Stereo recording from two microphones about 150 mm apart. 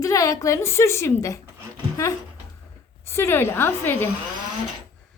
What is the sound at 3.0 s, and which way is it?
A woman's voice, 15° left (ahead or behind).